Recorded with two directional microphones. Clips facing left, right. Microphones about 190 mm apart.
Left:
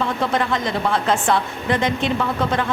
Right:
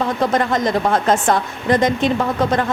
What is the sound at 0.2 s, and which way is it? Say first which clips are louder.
A woman's voice: right 4 dB; 45° right (ahead or behind).